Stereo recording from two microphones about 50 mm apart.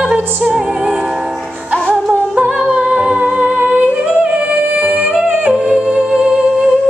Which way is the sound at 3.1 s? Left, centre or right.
Right.